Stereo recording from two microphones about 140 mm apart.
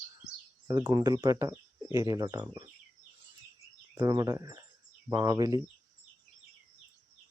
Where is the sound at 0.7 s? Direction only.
30° right (ahead or behind).